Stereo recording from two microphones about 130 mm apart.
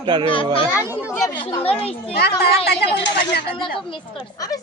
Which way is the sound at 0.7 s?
15° right (ahead or behind).